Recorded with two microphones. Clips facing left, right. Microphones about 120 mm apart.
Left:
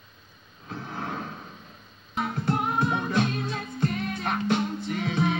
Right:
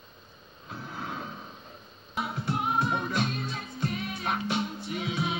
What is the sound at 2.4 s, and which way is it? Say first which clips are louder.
Music: left 2 dB; 50° left (ahead or behind).